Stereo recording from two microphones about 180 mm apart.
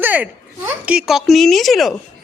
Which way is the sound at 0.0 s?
10° right (ahead or behind).